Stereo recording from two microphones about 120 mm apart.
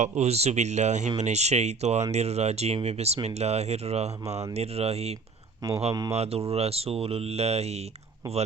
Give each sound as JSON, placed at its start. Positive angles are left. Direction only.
{"t": 0.0, "sound": "speech", "side_deg": -60}
{"t": 5.9, "sound": "speech", "side_deg": -30}
{"t": 6.1, "sound": "speech", "side_deg": -55}